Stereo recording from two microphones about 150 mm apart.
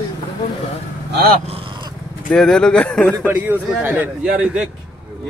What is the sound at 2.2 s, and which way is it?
Speech, 5° left (ahead or behind).